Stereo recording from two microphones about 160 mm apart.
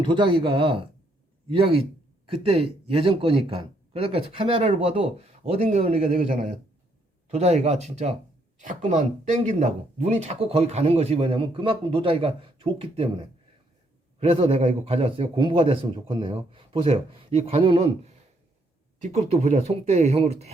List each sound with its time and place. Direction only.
0.0 s speech: 30° right (ahead or behind)
6.1 s speech: 50° right (ahead or behind); by 13.1 s 35° right (ahead or behind)
14.2 s speech: 35° right (ahead or behind)